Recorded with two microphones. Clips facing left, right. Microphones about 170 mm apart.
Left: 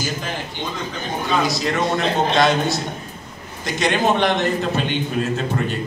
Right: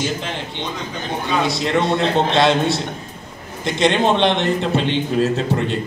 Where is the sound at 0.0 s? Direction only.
25° right (ahead or behind).